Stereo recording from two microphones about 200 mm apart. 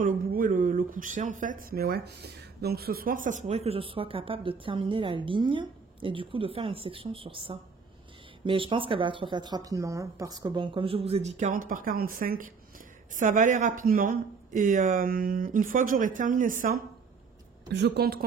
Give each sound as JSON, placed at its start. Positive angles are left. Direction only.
{"t": 0.0, "sound": "speech", "side_deg": -45}
{"t": 17.7, "sound": "a woman's voice", "side_deg": -55}